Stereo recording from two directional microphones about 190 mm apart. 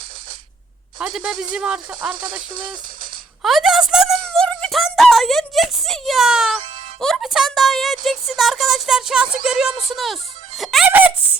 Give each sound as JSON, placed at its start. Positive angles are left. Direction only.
{"t": 0.9, "sound": "speech", "side_deg": -5}
{"t": 2.5, "sound": "speech", "side_deg": -45}
{"t": 3.4, "sound": "music", "side_deg": 0}
{"t": 7.0, "sound": "a sound", "side_deg": 0}
{"t": 8.4, "sound": "speech", "side_deg": 0}